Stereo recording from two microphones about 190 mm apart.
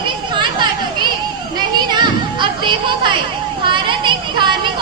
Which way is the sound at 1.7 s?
25° right (ahead or behind).